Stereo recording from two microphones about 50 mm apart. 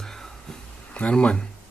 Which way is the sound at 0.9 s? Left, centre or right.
Left.